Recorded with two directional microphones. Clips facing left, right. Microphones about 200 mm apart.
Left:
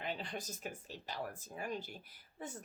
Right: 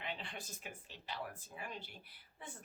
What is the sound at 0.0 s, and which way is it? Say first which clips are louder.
Speech: left 4 dB; 40° left (ahead or behind).